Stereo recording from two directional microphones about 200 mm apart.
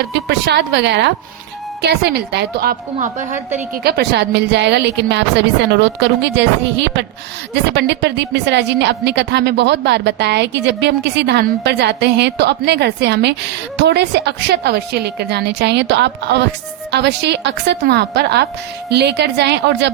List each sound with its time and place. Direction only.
0.1 s a woman's voice: 55° right (ahead or behind)
3.8 s a woman's voice: 55° right (ahead or behind)
7.5 s a woman's voice: 60° right (ahead or behind)